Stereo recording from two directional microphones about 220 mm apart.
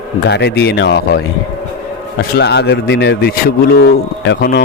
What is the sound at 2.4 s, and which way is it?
A man's voice, 50° left (ahead or behind).